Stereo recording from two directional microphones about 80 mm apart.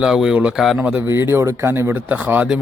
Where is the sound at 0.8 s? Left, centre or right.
Centre.